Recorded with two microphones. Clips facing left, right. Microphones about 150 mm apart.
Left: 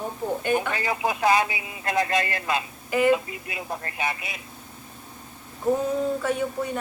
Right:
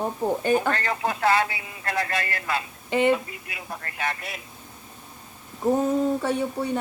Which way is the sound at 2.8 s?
25° right (ahead or behind).